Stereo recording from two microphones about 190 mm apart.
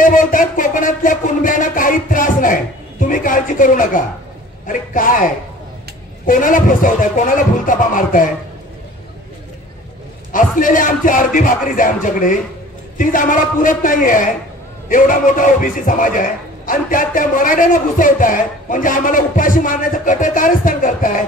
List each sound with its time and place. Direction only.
0.0 s a sound: 45° left (ahead or behind)
4.6 s speech: 45° left (ahead or behind)
10.3 s speech: 45° left (ahead or behind)